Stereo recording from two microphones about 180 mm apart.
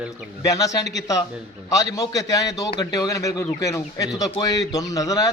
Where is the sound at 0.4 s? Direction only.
20° left (ahead or behind).